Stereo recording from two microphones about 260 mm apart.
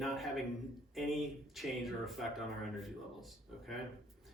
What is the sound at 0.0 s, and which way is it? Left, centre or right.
A man's voice, centre.